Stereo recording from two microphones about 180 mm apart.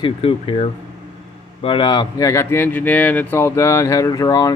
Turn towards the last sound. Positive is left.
turn(degrees=20)  # may be behind; listen again after turning